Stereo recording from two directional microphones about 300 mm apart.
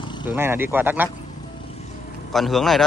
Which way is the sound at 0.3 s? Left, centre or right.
Centre.